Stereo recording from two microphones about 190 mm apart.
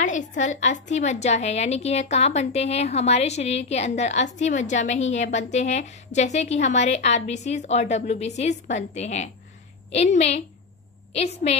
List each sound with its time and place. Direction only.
0.0 s a woman's voice: 40° left (ahead or behind)